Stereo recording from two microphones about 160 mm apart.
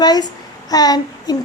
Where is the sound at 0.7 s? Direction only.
25° left (ahead or behind).